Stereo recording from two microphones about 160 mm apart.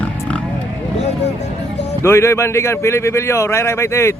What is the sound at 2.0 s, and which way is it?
A man's voice, 15° left (ahead or behind).